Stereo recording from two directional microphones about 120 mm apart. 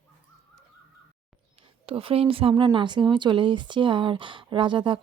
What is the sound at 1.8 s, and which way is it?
Speech, 50° right (ahead or behind).